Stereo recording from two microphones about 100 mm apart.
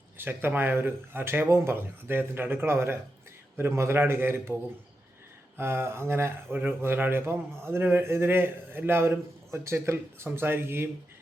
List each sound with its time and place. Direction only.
0.2 s speech: 20° right (ahead or behind)
5.5 s speech: 25° right (ahead or behind)